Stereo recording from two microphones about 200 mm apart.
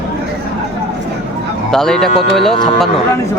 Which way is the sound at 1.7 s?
Centre (ahead or behind).